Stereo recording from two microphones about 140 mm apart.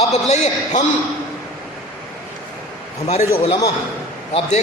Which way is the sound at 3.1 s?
50° left (ahead or behind).